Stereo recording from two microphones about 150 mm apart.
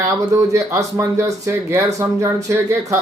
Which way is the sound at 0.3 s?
20° right (ahead or behind).